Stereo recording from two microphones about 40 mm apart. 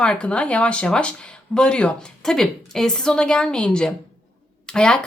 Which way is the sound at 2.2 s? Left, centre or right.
Centre.